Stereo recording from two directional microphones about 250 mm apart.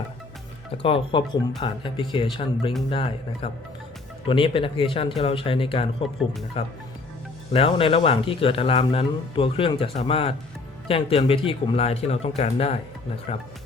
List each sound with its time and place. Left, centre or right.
0.8 s speech: left